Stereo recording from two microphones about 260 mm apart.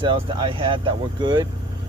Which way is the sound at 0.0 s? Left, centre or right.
Centre.